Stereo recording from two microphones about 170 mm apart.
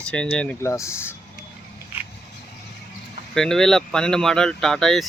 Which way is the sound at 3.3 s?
5° left (ahead or behind).